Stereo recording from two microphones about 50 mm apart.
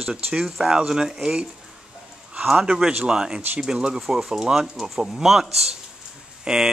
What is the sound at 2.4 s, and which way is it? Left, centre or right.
A man's voice, centre.